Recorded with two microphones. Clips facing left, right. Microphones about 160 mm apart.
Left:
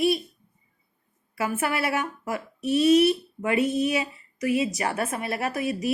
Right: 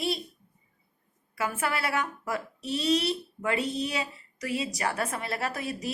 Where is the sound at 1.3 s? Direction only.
25° left (ahead or behind).